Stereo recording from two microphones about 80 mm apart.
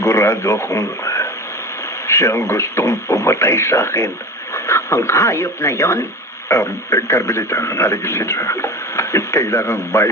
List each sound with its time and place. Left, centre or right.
0.0 s speech: left